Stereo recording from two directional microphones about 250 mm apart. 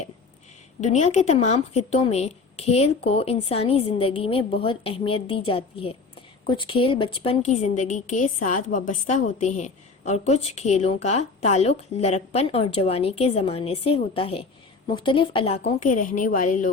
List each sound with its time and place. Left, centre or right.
0.8 s a woman's voice: left